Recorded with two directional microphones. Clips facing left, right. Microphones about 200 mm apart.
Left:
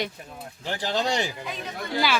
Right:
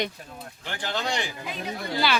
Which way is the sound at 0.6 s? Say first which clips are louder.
Left 4 dB; 35° left (ahead or behind).